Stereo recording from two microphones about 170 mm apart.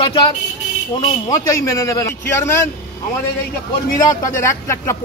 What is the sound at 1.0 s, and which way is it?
A man's voice, 20° left (ahead or behind).